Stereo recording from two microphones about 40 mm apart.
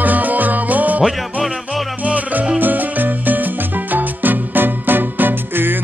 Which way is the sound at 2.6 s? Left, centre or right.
Right.